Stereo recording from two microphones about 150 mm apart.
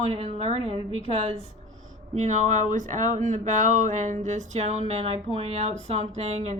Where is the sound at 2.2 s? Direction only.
55° right (ahead or behind).